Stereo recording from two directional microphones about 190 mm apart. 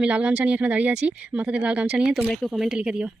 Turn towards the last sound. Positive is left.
turn(degrees=-5)  # may be behind; listen again after turning